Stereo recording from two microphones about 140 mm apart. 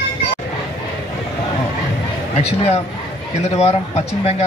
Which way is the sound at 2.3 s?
45° left (ahead or behind).